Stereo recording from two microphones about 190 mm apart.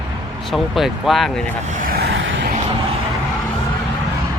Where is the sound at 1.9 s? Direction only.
60° right (ahead or behind).